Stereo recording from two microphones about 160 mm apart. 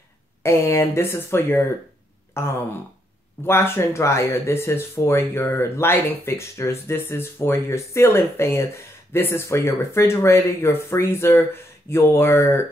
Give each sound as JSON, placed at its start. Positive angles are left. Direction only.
{"t": 0.4, "sound": "speech", "side_deg": 15}